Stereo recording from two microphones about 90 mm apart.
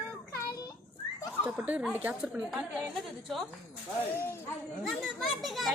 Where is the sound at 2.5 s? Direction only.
5° right (ahead or behind).